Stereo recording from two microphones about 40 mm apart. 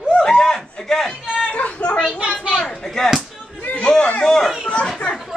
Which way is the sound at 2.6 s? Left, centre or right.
Centre.